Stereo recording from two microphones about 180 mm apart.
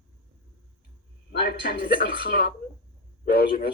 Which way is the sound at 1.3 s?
60° left (ahead or behind).